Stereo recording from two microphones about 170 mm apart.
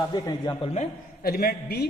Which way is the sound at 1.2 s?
65° left (ahead or behind).